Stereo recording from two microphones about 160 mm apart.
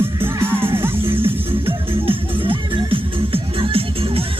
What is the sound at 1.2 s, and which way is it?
Music, 35° right (ahead or behind).